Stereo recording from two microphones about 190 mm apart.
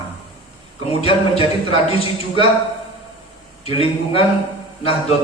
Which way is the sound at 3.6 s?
30° left (ahead or behind).